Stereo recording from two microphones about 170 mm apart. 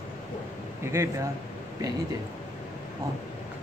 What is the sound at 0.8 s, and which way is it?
Speech, 15° right (ahead or behind).